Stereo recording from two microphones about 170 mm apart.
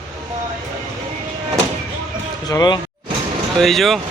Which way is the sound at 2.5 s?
20° left (ahead or behind).